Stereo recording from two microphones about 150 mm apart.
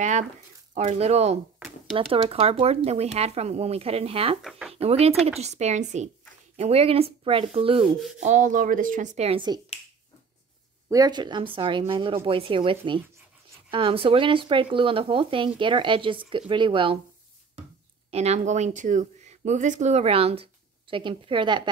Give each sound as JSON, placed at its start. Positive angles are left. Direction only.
{"t": 0.7, "sound": "speech", "side_deg": -45}
{"t": 4.4, "sound": "speech", "side_deg": 0}
{"t": 4.7, "sound": "speech", "side_deg": -45}
{"t": 8.2, "sound": "speech", "side_deg": -55}
{"t": 10.9, "sound": "speech", "side_deg": -25}
{"t": 18.1, "sound": "speech", "side_deg": -45}